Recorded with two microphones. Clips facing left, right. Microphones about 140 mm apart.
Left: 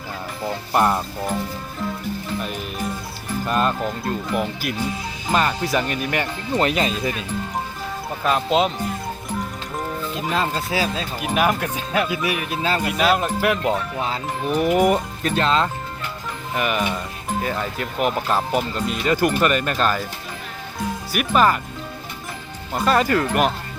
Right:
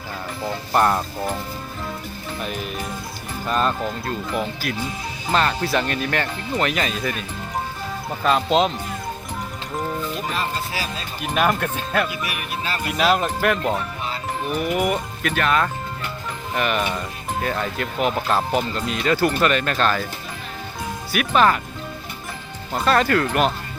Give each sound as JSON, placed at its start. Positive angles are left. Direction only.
{"t": 0.7, "sound": "speech", "side_deg": 5}
{"t": 3.4, "sound": "speech", "side_deg": 5}
{"t": 6.6, "sound": "speech", "side_deg": 30}
{"t": 8.2, "sound": "speech", "side_deg": 5}
{"t": 11.2, "sound": "speech", "side_deg": 10}
{"t": 12.0, "sound": "speech", "side_deg": 25}
{"t": 12.9, "sound": "speech", "side_deg": 0}
{"t": 14.5, "sound": "speech", "side_deg": 40}
{"t": 16.6, "sound": "speech", "side_deg": 5}
{"t": 21.1, "sound": "speech", "side_deg": 5}
{"t": 22.7, "sound": "speech", "side_deg": 5}